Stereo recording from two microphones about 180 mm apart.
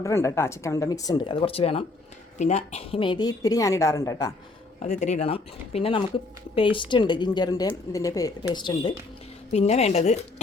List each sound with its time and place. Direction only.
0.0 s a woman's voice: 15° left (ahead or behind)
4.8 s a woman's voice: 40° left (ahead or behind)
9.5 s speech: 40° left (ahead or behind)